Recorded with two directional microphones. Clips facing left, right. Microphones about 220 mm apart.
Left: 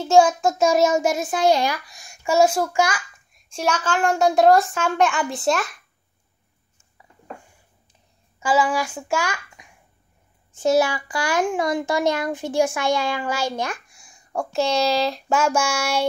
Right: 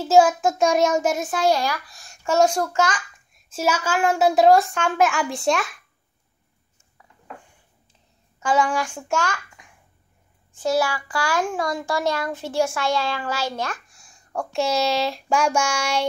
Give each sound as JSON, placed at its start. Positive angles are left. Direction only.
{"t": 0.0, "sound": "a child's voice", "side_deg": -5}
{"t": 3.4, "sound": "a child's voice", "side_deg": -5}
{"t": 8.4, "sound": "a child's voice", "side_deg": 5}
{"t": 14.6, "sound": "a child's voice", "side_deg": 0}